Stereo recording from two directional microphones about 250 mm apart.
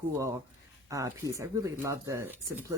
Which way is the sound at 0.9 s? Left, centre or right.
Centre.